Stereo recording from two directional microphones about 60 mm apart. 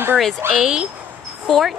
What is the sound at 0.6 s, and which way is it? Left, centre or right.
Speech, centre.